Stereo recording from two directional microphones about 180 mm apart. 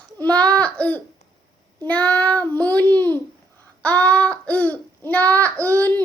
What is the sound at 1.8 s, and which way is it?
A child's voice, 5° left (ahead or behind).